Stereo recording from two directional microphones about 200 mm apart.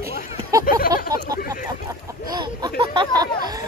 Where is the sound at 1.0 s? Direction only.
20° right (ahead or behind).